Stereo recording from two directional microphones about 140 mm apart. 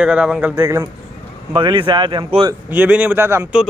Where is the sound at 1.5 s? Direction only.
35° right (ahead or behind).